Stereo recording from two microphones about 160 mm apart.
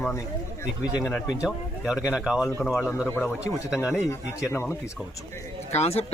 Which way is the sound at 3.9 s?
15° left (ahead or behind).